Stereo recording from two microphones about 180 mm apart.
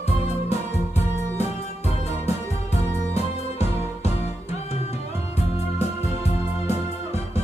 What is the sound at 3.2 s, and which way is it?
Music, 35° left (ahead or behind).